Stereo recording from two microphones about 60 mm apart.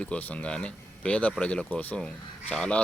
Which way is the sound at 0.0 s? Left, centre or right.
Left.